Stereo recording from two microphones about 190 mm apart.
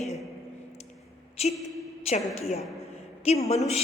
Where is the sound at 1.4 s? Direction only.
35° left (ahead or behind).